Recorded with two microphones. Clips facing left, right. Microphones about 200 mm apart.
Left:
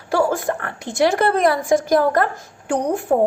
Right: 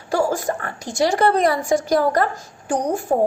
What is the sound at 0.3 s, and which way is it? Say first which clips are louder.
A woman's voice: left 1 dB; 60° left (ahead or behind).